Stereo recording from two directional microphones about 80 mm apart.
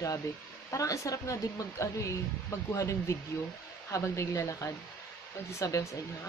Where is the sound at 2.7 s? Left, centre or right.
Left.